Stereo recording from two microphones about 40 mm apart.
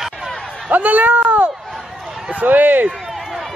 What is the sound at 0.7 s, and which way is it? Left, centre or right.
Speech, right.